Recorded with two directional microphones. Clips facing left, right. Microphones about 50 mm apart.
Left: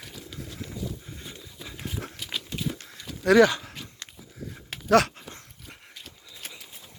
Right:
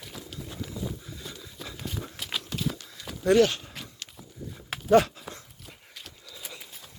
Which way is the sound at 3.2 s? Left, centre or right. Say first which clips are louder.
Left 3 dB; left.